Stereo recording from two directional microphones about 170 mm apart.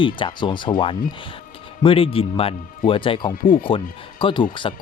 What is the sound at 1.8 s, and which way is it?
Speech, 35° left (ahead or behind).